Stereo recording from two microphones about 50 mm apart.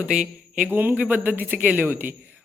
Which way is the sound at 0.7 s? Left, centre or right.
Right.